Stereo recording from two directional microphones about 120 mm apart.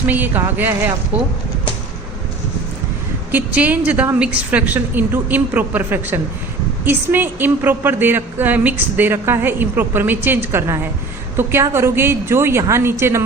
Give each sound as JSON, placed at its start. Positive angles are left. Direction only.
{"t": 0.1, "sound": "a woman's voice", "side_deg": -15}
{"t": 3.3, "sound": "a woman's voice", "side_deg": -15}